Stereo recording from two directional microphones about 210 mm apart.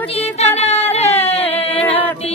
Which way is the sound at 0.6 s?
30° left (ahead or behind).